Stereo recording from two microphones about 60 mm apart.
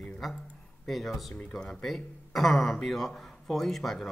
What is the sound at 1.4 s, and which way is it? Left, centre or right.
Speech, centre.